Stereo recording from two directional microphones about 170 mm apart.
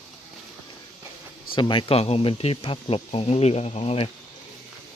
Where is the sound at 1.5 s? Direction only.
30° left (ahead or behind).